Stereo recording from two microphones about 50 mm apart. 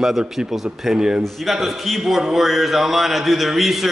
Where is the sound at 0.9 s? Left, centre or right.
Centre.